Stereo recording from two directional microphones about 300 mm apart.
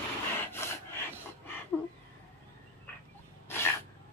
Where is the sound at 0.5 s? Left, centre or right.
Centre.